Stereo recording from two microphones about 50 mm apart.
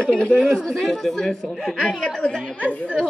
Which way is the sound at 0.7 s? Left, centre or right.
Centre.